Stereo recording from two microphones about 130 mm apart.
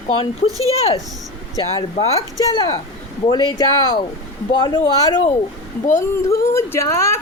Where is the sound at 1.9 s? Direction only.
55° left (ahead or behind).